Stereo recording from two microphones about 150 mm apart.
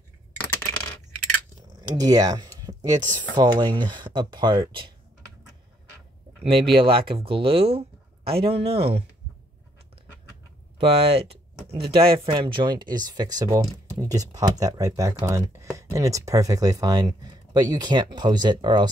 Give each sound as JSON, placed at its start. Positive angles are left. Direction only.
{"t": 1.8, "sound": "speech", "side_deg": -25}
{"t": 6.7, "sound": "speech", "side_deg": -35}
{"t": 10.8, "sound": "speech", "side_deg": -40}